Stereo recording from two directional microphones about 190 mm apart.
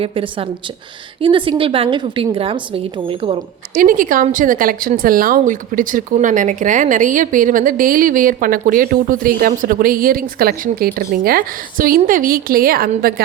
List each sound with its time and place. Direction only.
0.0 s a woman's voice: 30° right (ahead or behind)
3.8 s a woman's voice: 45° right (ahead or behind)